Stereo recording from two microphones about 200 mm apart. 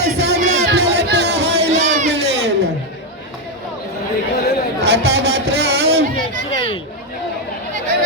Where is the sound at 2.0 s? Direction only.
60° right (ahead or behind).